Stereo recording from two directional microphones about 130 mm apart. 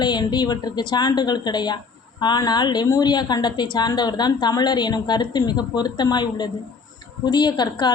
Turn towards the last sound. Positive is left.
turn(degrees=35)  # may be behind; listen again after turning